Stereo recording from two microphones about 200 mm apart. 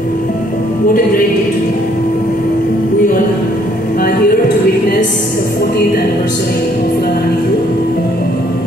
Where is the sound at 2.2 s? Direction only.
45° left (ahead or behind).